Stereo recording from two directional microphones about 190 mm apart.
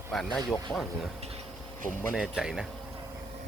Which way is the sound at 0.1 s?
Centre (ahead or behind).